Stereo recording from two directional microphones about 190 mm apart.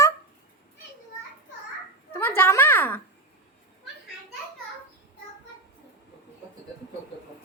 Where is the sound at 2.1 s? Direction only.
10° left (ahead or behind).